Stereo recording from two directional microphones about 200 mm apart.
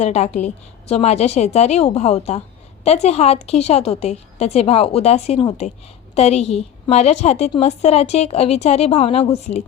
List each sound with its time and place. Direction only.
0.0 s a woman's voice: 35° left (ahead or behind)